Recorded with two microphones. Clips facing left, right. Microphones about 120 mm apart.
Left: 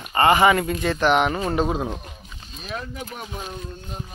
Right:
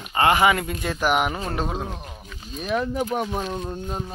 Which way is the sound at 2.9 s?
50° right (ahead or behind).